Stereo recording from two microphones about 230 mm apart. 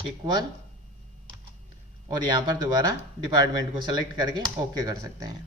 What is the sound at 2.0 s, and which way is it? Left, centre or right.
Speech, centre.